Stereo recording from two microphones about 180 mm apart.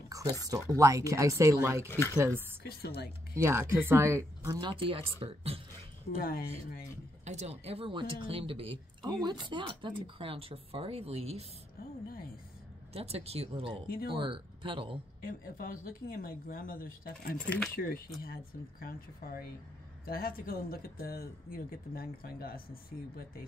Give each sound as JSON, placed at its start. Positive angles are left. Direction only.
{"t": 0.1, "sound": "speech", "side_deg": -20}
{"t": 1.9, "sound": "speech", "side_deg": 15}
{"t": 2.1, "sound": "speech", "side_deg": -15}
{"t": 3.4, "sound": "speech", "side_deg": -15}
{"t": 6.1, "sound": "speech", "side_deg": 60}
{"t": 7.2, "sound": "speech", "side_deg": -35}
{"t": 12.9, "sound": "speech", "side_deg": -35}
{"t": 15.2, "sound": "speech", "side_deg": 55}
{"t": 17.5, "sound": "speech", "side_deg": 5}
{"t": 17.7, "sound": "speech", "side_deg": 55}